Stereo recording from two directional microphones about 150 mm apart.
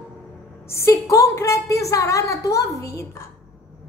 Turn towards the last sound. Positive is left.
turn(degrees=20)  # may be behind; listen again after turning